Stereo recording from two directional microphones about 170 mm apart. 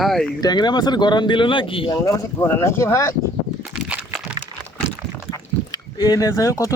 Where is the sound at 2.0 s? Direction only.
15° left (ahead or behind).